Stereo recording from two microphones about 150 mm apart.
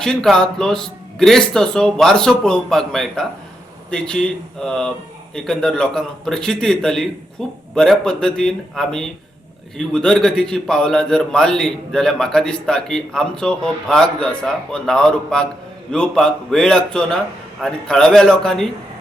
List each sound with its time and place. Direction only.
0.0 s a man's voice: 5° left (ahead or behind)